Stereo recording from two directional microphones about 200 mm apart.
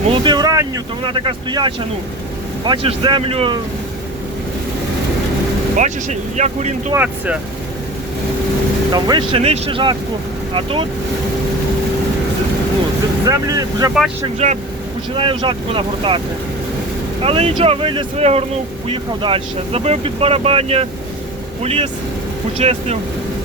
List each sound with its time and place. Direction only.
0.1 s speech: 25° right (ahead or behind)
5.7 s speech: 35° right (ahead or behind)
6.9 s speech: 10° right (ahead or behind)
8.9 s speech: 20° right (ahead or behind)
13.2 s speech: 15° right (ahead or behind)
14.3 s speech: 35° right (ahead or behind)
17.2 s speech: 30° right (ahead or behind)